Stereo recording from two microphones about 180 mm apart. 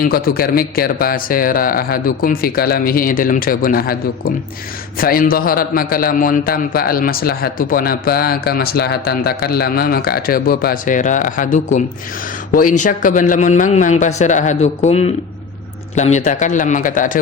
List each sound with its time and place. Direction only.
0.0 s a man's voice: 55° left (ahead or behind)